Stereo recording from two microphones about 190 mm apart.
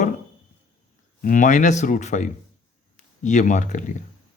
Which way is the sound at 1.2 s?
45° left (ahead or behind).